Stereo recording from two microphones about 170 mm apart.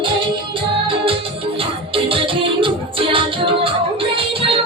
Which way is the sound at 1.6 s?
30° right (ahead or behind).